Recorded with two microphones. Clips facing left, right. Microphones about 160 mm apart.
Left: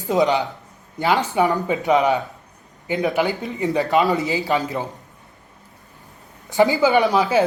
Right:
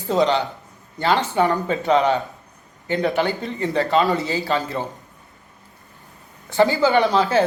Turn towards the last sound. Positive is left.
turn(degrees=15)  # may be behind; listen again after turning